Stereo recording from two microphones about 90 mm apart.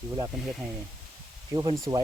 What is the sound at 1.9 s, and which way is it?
Speech, 55° right (ahead or behind).